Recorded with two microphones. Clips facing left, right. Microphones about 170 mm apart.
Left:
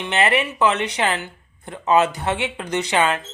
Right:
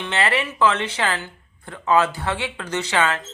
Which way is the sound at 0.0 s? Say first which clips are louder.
Left 3 dB; 20° left (ahead or behind).